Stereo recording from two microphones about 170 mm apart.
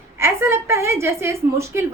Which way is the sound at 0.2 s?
15° right (ahead or behind).